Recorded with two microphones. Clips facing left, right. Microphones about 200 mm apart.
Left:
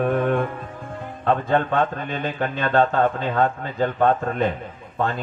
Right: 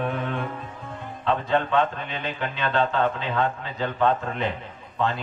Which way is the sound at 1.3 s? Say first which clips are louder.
Left 3 dB; 50° left (ahead or behind).